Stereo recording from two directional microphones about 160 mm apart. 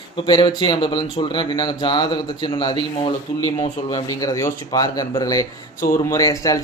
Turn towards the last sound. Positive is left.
turn(degrees=20)  # may be behind; listen again after turning